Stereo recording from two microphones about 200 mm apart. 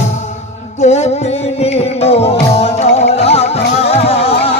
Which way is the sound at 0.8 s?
35° left (ahead or behind).